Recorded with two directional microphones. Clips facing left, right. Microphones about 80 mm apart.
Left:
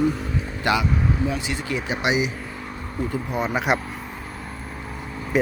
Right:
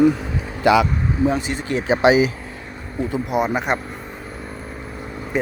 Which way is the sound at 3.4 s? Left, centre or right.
Centre.